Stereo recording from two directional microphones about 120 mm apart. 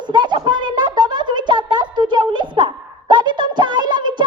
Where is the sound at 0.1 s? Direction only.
40° right (ahead or behind).